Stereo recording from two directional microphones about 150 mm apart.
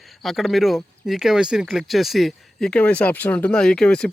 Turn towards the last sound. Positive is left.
turn(degrees=5)  # may be behind; listen again after turning